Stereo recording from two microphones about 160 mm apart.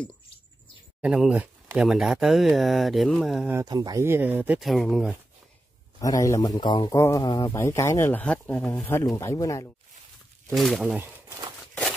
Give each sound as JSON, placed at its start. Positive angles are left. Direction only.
{"t": 1.0, "sound": "speech", "side_deg": -5}
{"t": 3.6, "sound": "speech", "side_deg": -25}
{"t": 5.9, "sound": "a man's voice", "side_deg": 20}
{"t": 10.5, "sound": "speech", "side_deg": 0}
{"t": 11.0, "sound": "speech", "side_deg": -15}